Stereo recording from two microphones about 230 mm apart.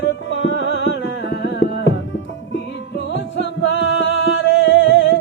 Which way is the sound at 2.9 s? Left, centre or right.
Left.